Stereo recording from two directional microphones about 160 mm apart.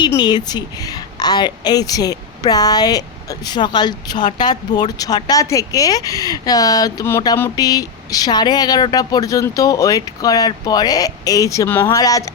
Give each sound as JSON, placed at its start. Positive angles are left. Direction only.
{"t": 0.2, "sound": "speech", "side_deg": 25}